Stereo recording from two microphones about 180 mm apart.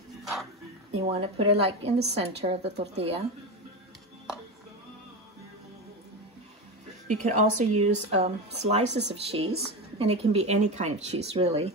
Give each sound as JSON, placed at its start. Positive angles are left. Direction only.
{"t": 0.2, "sound": "music", "side_deg": 0}
{"t": 0.9, "sound": "speech", "side_deg": -35}
{"t": 7.1, "sound": "speech", "side_deg": -40}